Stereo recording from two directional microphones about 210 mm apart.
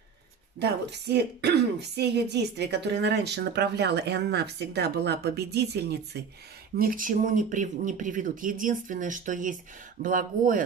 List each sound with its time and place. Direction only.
0.6 s speech: 55° right (ahead or behind)
6.8 s speech: 40° right (ahead or behind)